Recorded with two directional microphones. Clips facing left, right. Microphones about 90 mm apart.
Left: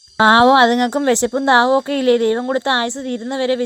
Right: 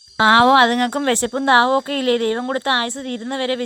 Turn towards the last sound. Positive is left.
turn(degrees=20)  # may be behind; listen again after turning